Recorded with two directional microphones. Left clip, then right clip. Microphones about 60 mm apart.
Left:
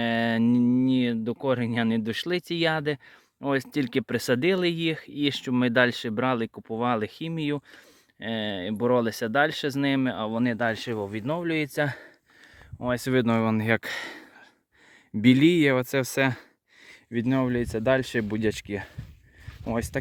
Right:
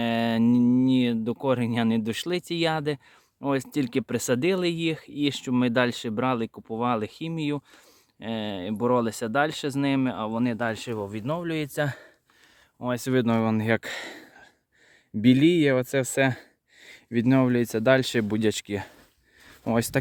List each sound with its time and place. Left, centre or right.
0.0 s a sound: centre
2.2 s speech: centre
7.3 s speech: centre
8.2 s speech: centre
10.7 s speech: left
12.8 s speech: centre
15.2 s speech: centre
17.1 s speech: right
18.4 s speech: right